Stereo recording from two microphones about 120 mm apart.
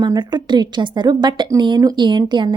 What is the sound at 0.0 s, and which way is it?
A woman's voice, 40° right (ahead or behind).